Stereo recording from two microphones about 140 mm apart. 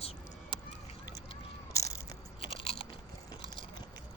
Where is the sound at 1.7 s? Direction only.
25° left (ahead or behind).